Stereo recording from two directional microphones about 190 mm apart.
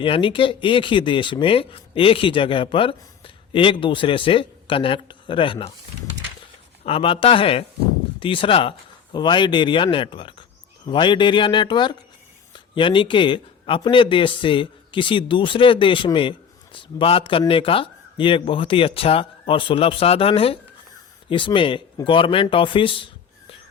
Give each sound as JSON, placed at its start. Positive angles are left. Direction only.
{"t": 0.0, "sound": "speech", "side_deg": 25}
{"t": 6.8, "sound": "speech", "side_deg": 30}